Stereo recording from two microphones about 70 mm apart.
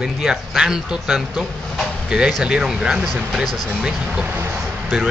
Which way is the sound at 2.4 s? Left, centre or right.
Centre.